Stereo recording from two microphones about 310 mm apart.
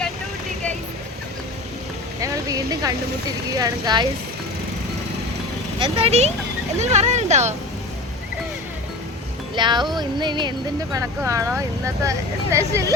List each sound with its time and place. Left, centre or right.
2.2 s speech: centre
5.8 s speech: centre
9.6 s speech: centre